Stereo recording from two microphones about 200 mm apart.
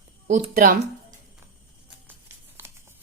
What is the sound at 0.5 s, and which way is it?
Speech, 45° right (ahead or behind).